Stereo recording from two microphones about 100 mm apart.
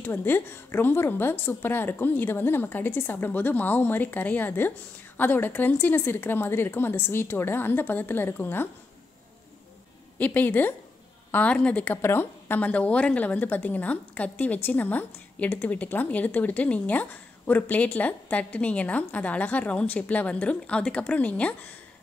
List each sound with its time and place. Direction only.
0.0 s a woman's voice: 20° left (ahead or behind)
10.1 s a woman's voice: 15° left (ahead or behind)